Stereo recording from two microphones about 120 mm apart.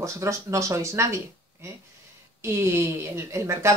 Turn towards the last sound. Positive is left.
turn(degrees=-25)  # may be behind; listen again after turning